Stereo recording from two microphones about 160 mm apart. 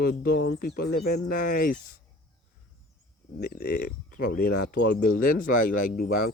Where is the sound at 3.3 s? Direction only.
65° left (ahead or behind).